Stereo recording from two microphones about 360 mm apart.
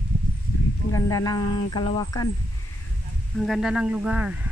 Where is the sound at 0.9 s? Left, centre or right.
Centre.